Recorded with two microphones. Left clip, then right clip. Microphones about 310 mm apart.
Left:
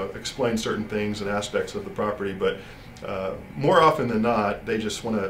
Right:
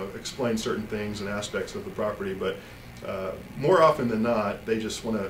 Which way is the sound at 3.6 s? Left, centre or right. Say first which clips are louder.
Left 2 dB; left.